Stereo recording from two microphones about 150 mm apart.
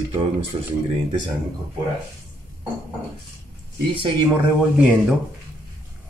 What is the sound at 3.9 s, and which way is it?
Speech, 35° right (ahead or behind).